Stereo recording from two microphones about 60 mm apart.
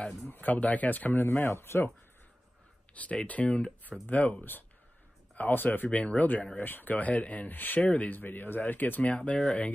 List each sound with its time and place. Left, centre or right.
0.3 s speech: left
1.2 s speech: left
2.9 s speech: left
5.9 s speech: left